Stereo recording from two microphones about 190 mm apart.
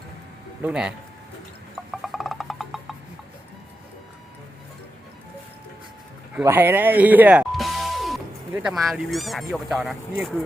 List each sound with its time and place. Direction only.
0.6 s speech: 5° right (ahead or behind)
1.9 s a sound: centre (ahead or behind)
6.3 s music: 10° right (ahead or behind)
8.5 s speech: centre (ahead or behind)